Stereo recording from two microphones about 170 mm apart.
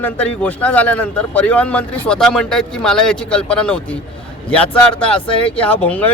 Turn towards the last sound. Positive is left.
turn(degrees=10)  # may be behind; listen again after turning